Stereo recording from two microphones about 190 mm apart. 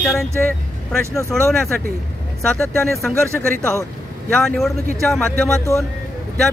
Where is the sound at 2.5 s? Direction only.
5° left (ahead or behind).